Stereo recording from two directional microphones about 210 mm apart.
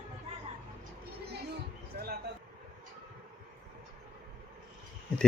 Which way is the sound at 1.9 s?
45° right (ahead or behind).